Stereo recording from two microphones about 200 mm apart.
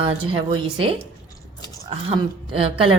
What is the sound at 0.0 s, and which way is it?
Speech, 25° right (ahead or behind).